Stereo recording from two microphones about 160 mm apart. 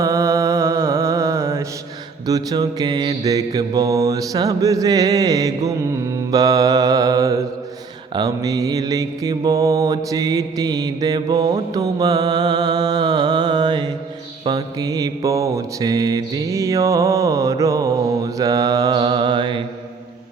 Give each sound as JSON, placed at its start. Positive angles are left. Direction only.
{"t": 0.0, "sound": "mantra", "side_deg": -20}